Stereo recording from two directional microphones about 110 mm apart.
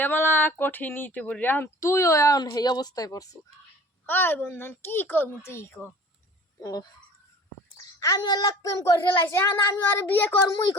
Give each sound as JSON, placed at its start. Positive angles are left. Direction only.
{"t": 0.0, "sound": "speech", "side_deg": 20}
{"t": 4.0, "sound": "speech", "side_deg": 20}
{"t": 6.6, "sound": "frog", "side_deg": 35}
{"t": 7.9, "sound": "speech", "side_deg": 30}